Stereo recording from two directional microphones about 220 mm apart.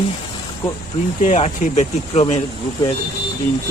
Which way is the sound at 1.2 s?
30° left (ahead or behind).